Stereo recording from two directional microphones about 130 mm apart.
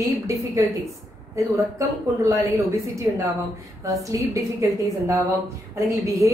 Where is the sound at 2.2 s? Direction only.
25° right (ahead or behind).